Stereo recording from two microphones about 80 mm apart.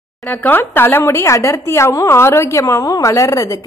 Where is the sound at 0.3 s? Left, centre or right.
Left.